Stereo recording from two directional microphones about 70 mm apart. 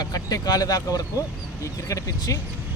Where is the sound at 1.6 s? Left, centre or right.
Left.